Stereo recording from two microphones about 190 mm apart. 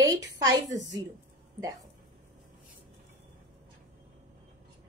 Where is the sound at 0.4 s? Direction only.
20° right (ahead or behind).